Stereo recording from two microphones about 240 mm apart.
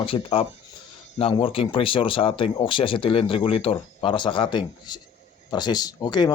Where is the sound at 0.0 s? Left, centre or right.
Left.